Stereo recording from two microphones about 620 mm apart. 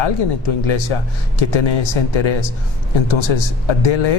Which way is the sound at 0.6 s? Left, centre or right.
Left.